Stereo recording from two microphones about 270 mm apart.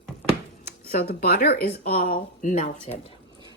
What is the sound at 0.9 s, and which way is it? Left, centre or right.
Speech, left.